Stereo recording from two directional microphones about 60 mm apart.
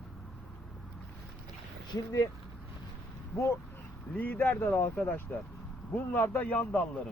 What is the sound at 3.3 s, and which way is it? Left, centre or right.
Speech, left.